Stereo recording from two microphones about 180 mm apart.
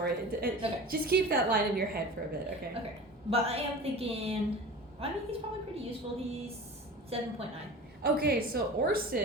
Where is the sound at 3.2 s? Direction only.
35° right (ahead or behind).